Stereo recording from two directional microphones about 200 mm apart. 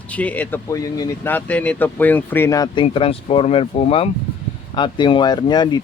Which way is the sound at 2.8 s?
30° left (ahead or behind).